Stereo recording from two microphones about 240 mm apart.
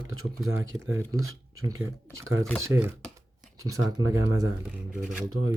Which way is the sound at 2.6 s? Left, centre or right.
Centre.